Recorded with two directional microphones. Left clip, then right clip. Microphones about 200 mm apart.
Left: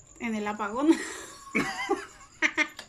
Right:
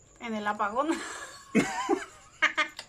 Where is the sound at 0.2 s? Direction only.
Centre (ahead or behind).